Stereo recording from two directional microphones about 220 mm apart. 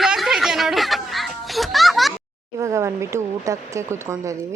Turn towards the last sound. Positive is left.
turn(degrees=-15)  # may be behind; listen again after turning